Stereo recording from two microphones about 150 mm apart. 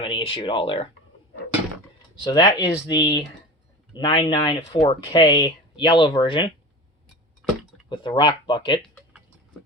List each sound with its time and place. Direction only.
0.0 s speech: 35° left (ahead or behind)
2.2 s speech: 30° left (ahead or behind)
7.9 s speech: 30° left (ahead or behind)